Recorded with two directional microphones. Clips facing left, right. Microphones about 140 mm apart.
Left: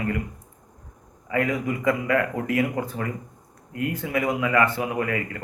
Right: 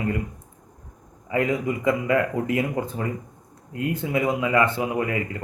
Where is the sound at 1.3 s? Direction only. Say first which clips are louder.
Right 1 dB; 25° right (ahead or behind).